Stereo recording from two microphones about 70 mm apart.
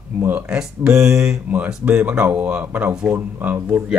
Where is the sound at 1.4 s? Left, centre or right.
Right.